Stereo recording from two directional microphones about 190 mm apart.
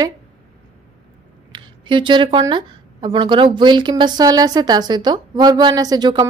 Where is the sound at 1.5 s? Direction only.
25° right (ahead or behind).